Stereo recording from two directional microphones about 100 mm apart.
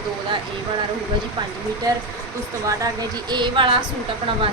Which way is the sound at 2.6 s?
40° right (ahead or behind).